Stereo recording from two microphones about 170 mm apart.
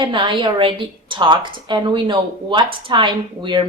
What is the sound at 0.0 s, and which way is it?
A woman's voice, 30° right (ahead or behind).